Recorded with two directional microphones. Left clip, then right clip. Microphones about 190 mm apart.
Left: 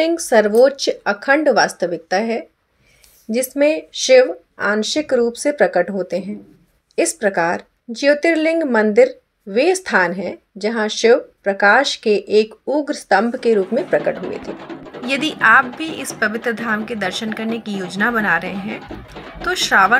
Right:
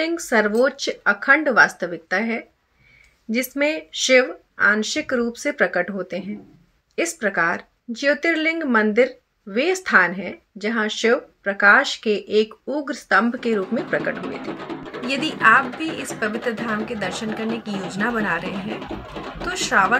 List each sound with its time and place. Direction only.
0.0 s speech: 25° left (ahead or behind)
15.0 s a woman's voice: 5° left (ahead or behind)